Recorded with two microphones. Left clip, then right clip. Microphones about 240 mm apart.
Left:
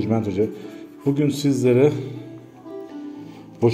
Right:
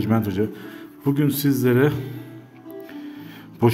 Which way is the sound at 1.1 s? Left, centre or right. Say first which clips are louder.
Even; right.